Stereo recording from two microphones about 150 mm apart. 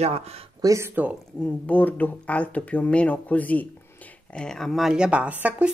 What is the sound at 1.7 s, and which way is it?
Speech, 10° left (ahead or behind).